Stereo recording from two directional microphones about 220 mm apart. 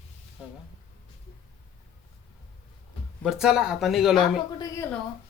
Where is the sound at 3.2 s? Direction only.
Centre (ahead or behind).